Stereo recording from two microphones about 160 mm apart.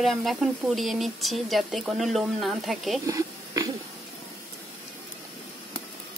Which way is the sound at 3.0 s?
20° right (ahead or behind).